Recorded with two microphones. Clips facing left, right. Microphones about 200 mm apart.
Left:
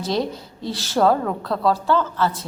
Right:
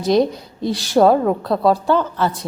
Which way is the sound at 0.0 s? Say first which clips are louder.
Right 7 dB; 15° right (ahead or behind).